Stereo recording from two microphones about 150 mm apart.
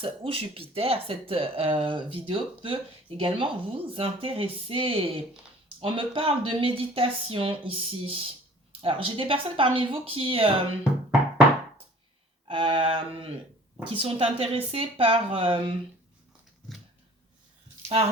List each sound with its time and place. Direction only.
0.0 s speech: 35° right (ahead or behind)
12.5 s speech: 35° right (ahead or behind)